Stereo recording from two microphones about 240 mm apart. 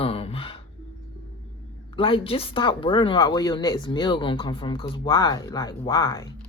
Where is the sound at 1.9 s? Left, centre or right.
Left.